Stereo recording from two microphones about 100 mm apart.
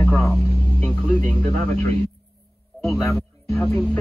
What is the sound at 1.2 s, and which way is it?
Speech, 90° right.